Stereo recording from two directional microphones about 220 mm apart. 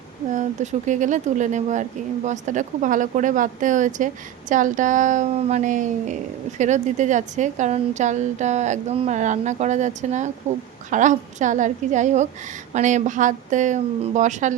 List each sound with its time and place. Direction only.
0.3 s speech: 35° right (ahead or behind)